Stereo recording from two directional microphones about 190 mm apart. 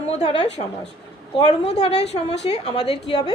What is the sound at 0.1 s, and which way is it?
Speech, 30° left (ahead or behind).